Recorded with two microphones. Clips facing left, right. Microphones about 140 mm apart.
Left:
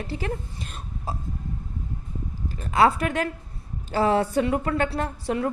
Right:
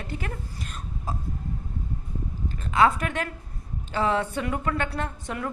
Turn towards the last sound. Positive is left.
turn(degrees=35)  # may be behind; listen again after turning